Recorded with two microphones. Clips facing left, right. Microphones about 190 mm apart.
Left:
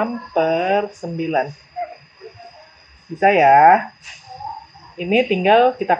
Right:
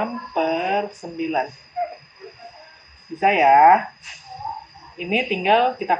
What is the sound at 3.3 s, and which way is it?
Speech, 45° left (ahead or behind).